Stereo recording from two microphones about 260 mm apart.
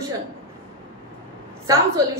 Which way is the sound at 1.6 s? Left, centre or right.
Centre.